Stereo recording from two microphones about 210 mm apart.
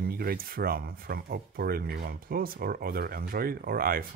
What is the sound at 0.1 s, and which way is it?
Speech, 45° right (ahead or behind).